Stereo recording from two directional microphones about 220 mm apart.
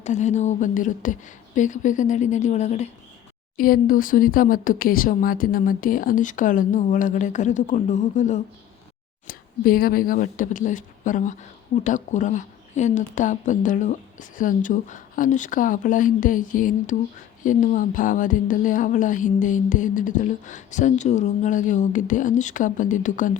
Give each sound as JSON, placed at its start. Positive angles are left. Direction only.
{"t": 0.0, "sound": "speech", "side_deg": 30}